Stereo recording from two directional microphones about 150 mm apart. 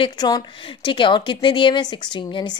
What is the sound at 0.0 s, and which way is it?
A woman's voice, 30° left (ahead or behind).